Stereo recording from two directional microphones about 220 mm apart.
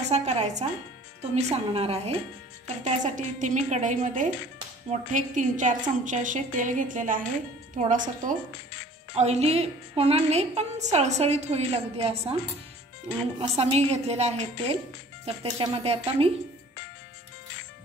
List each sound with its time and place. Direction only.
0.0 s a woman's voice: 30° right (ahead or behind)